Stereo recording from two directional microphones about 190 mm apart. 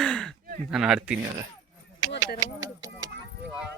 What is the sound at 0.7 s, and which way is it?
Speech, 5° right (ahead or behind).